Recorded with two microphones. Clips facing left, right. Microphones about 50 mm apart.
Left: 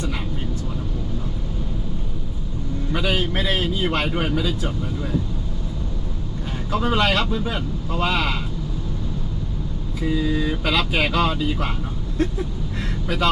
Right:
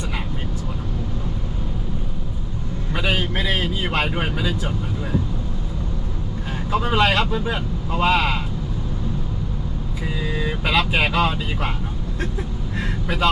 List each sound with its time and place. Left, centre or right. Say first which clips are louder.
2.9 s vehicle: even; centre
3.2 s speech: even; centre
6.7 s speech: right 1 dB; centre
10.0 s speech: left 5 dB; centre
12.8 s speech: right 1 dB; centre